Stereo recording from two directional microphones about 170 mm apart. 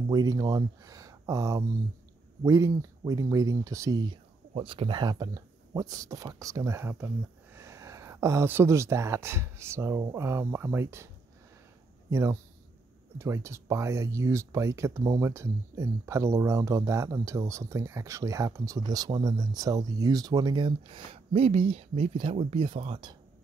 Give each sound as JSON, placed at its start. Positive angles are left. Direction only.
{"t": 0.1, "sound": "speech", "side_deg": -20}
{"t": 4.6, "sound": "speech", "side_deg": -30}
{"t": 12.1, "sound": "speech", "side_deg": -15}